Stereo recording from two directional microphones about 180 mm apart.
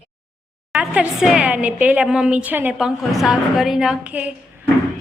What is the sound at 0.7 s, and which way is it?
A woman's voice, 5° right (ahead or behind).